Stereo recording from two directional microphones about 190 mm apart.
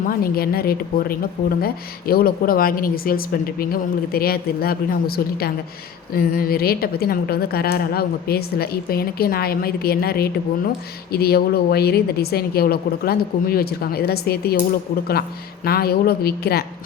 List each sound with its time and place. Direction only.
0.1 s a woman's voice: 50° left (ahead or behind)
15.6 s a woman's voice: 55° left (ahead or behind)